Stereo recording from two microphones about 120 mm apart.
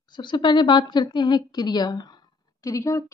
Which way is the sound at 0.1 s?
40° left (ahead or behind).